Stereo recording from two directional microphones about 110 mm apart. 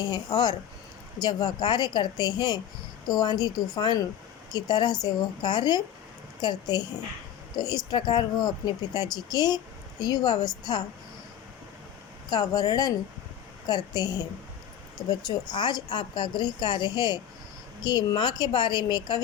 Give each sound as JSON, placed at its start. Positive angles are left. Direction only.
{"t": 0.0, "sound": "a woman's voice", "side_deg": 40}
{"t": 12.3, "sound": "speech", "side_deg": 40}